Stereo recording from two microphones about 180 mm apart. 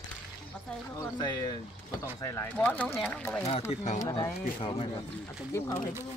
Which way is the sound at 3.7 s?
35° left (ahead or behind).